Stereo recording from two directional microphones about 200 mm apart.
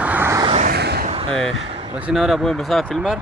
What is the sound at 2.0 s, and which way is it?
Speech, 5° right (ahead or behind).